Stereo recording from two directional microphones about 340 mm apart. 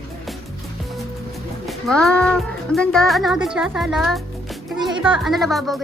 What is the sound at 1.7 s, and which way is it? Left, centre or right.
Speech, centre.